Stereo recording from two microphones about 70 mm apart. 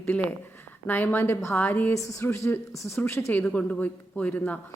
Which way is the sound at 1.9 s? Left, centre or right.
Left.